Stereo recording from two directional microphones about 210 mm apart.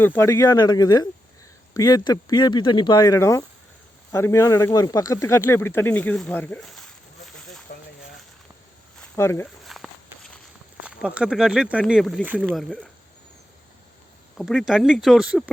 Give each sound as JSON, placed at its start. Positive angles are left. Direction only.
{"t": 0.0, "sound": "speech", "side_deg": 10}
{"t": 9.0, "sound": "a sound", "side_deg": 15}
{"t": 9.6, "sound": "walk", "side_deg": 0}
{"t": 10.8, "sound": "speech", "side_deg": -5}
{"t": 14.3, "sound": "speech", "side_deg": 0}